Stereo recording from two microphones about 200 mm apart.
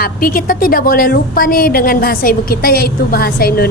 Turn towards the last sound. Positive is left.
turn(degrees=50)  # may be behind; listen again after turning